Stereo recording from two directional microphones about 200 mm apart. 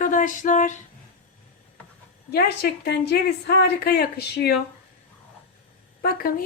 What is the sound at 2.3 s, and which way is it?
A woman's voice, 55° left (ahead or behind).